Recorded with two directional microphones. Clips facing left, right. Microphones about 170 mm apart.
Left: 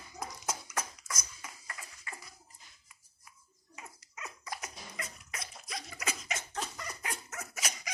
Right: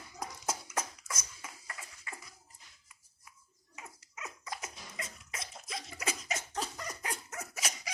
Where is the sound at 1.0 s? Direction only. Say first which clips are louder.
Even; 5° right (ahead or behind).